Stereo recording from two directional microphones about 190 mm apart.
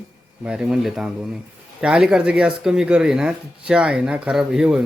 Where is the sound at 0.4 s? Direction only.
5° right (ahead or behind).